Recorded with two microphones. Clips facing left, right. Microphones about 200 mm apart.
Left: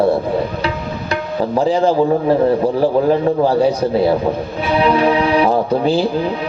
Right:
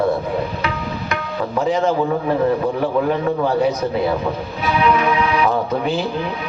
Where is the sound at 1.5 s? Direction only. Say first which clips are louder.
Left 4 dB; 30° left (ahead or behind).